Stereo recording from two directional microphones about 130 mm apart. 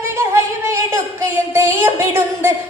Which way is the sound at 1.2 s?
20° right (ahead or behind).